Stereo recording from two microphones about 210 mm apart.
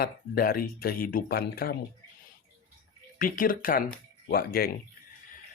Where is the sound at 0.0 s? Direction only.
45° left (ahead or behind).